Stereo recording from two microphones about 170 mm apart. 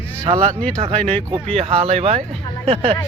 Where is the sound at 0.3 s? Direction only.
30° right (ahead or behind).